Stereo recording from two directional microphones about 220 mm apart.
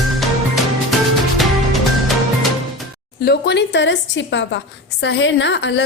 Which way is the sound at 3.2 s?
50° left (ahead or behind).